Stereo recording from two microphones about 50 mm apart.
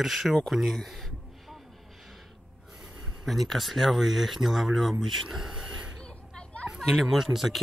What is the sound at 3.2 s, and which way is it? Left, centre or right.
Speech, centre.